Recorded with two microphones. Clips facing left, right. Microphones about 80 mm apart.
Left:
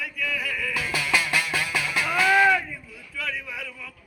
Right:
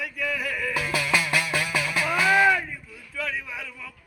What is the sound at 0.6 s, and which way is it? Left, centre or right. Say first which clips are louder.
Music: right 3 dB; right.